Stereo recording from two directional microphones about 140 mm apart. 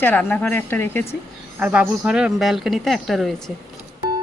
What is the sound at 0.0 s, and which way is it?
Speech, 15° left (ahead or behind).